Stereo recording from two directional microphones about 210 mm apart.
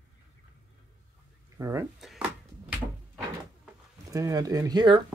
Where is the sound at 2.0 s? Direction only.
Centre (ahead or behind).